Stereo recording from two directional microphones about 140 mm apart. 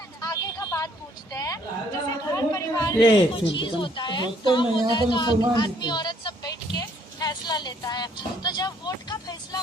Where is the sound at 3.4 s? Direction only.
35° left (ahead or behind).